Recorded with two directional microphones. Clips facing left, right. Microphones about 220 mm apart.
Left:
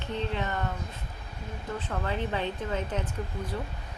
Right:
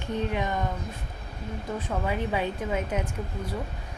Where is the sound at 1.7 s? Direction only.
10° right (ahead or behind).